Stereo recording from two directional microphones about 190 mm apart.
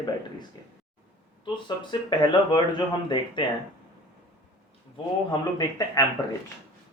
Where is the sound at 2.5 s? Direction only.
25° left (ahead or behind).